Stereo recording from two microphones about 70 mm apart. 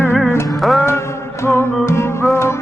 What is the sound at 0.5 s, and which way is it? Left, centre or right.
Music, centre.